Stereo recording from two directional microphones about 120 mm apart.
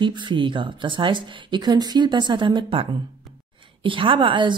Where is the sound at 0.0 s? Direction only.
40° right (ahead or behind).